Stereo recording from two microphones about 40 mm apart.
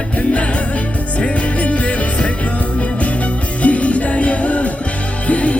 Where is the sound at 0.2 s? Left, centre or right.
Left.